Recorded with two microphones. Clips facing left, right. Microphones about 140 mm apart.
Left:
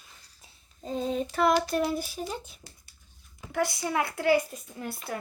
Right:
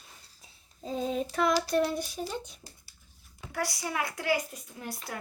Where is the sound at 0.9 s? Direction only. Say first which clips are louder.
Left 1 dB; centre (ahead or behind).